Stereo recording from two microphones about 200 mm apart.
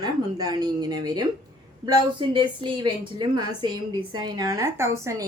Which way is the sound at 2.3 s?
25° right (ahead or behind).